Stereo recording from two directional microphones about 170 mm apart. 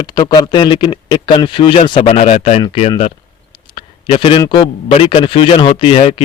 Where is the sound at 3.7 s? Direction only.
30° left (ahead or behind).